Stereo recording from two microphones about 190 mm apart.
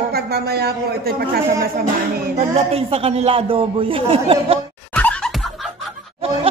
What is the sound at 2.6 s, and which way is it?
A man's voice, 30° right (ahead or behind).